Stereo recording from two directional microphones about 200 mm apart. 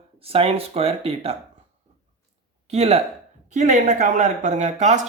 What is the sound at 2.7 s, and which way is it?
Speech, 30° right (ahead or behind).